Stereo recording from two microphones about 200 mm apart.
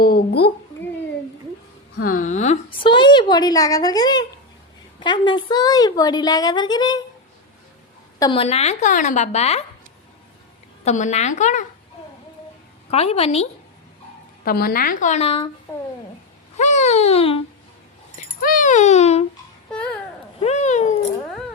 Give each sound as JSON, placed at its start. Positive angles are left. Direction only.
{"t": 0.0, "sound": "a woman's voice", "side_deg": 50}
{"t": 2.0, "sound": "a woman's voice", "side_deg": 45}
{"t": 8.2, "sound": "a woman's voice", "side_deg": 25}
{"t": 10.8, "sound": "a woman's voice", "side_deg": 35}
{"t": 12.9, "sound": "a woman's voice", "side_deg": 30}
{"t": 14.4, "sound": "a woman's voice", "side_deg": 50}
{"t": 16.6, "sound": "a woman's voice", "side_deg": 35}
{"t": 18.2, "sound": "dog", "side_deg": 45}
{"t": 19.7, "sound": "babbling", "side_deg": 5}
{"t": 20.4, "sound": "cat", "side_deg": 35}